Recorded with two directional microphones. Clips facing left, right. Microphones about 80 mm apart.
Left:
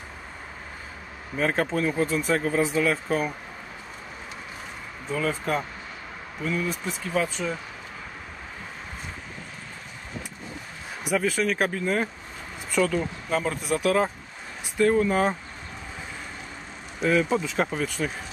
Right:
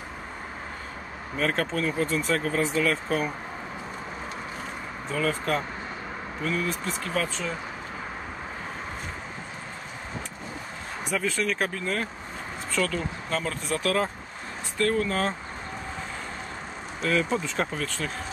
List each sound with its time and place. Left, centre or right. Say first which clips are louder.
1.3 s speech: left 2 dB; centre
5.1 s speech: even; centre
11.1 s speech: left 3 dB; centre
17.0 s speech: left 3 dB; centre